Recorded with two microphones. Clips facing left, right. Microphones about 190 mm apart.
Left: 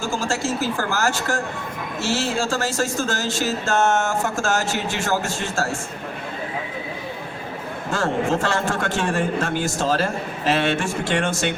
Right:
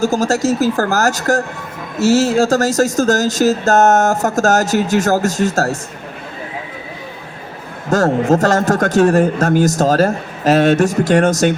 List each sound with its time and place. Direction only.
0.0 s speech: 40° right (ahead or behind)
7.9 s speech: 40° right (ahead or behind)